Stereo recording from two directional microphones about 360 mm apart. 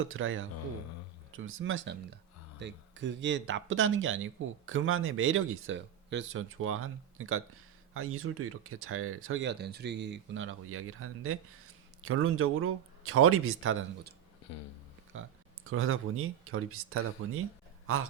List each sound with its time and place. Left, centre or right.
0.0 s speech: right
15.7 s a man's voice: right